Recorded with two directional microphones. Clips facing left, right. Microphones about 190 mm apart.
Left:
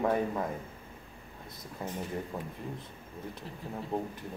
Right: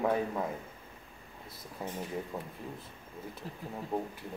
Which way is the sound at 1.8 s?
Centre (ahead or behind).